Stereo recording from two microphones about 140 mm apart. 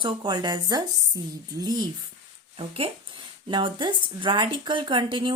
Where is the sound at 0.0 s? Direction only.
30° right (ahead or behind).